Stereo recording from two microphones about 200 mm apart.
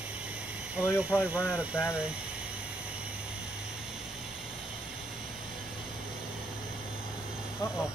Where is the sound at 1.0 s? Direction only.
5° right (ahead or behind).